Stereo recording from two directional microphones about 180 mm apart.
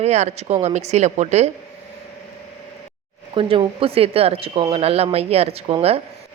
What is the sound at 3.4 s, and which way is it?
Speech, 30° right (ahead or behind).